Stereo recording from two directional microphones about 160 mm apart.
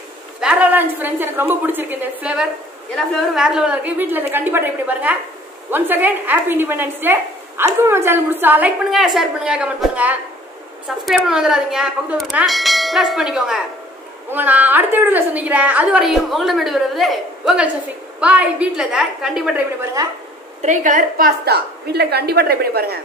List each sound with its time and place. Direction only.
0.4 s a woman's voice: 10° right (ahead or behind)
20.6 s a woman's voice: 50° right (ahead or behind); by 22.9 s 75° right (ahead or behind)